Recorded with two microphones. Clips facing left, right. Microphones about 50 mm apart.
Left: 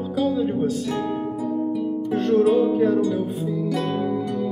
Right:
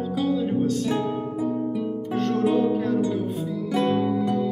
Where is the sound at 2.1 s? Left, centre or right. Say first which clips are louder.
Left 6 dB; centre.